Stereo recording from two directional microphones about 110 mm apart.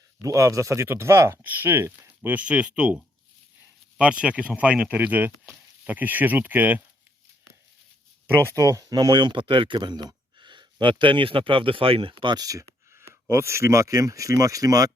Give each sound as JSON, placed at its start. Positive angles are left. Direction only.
{"t": 0.2, "sound": "speech", "side_deg": -30}
{"t": 8.5, "sound": "speech", "side_deg": -30}